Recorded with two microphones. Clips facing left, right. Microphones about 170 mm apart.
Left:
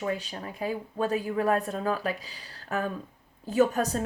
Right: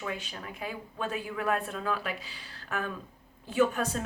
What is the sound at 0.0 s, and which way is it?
A woman's voice, 35° left (ahead or behind).